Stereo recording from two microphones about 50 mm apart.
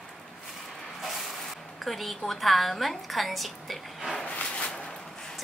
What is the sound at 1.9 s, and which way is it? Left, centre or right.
A woman's voice, centre.